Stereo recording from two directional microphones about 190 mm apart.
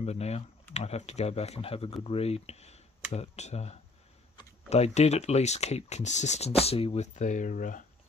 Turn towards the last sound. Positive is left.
turn(degrees=45)  # may be behind; listen again after turning